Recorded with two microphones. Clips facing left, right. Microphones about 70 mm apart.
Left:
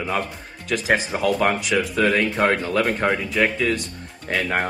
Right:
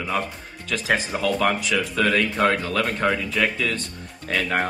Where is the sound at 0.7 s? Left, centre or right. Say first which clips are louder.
Left 2 dB; left.